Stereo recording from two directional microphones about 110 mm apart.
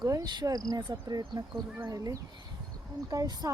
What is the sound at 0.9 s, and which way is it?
Speech, 25° right (ahead or behind).